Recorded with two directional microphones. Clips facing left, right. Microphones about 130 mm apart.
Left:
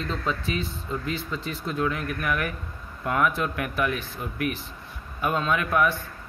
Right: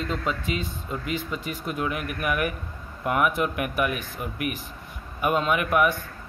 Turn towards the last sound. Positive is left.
turn(degrees=-15)  # may be behind; listen again after turning